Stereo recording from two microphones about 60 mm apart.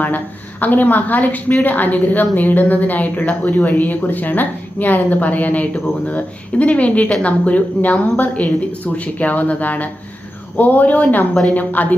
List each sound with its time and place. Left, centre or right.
0.6 s a woman's voice: left